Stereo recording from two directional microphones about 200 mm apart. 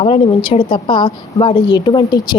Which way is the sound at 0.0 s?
25° left (ahead or behind).